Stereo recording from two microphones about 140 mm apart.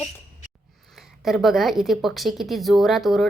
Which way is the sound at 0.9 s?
Centre (ahead or behind).